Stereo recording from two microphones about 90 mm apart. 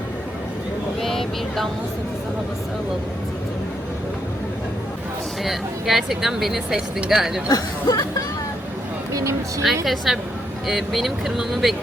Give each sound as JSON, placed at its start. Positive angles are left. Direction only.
{"t": 1.0, "sound": "speech", "side_deg": 5}
{"t": 5.4, "sound": "speech", "side_deg": 0}
{"t": 7.4, "sound": "speech", "side_deg": 40}
{"t": 9.1, "sound": "speech", "side_deg": -35}
{"t": 9.8, "sound": "speech", "side_deg": 0}